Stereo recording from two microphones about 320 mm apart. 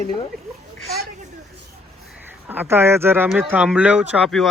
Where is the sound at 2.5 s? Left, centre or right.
Centre.